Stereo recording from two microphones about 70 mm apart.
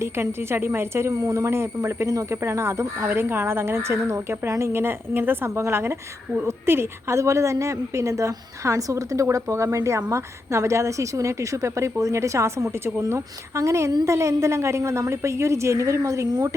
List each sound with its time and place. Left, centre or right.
0.0 s a woman's voice: right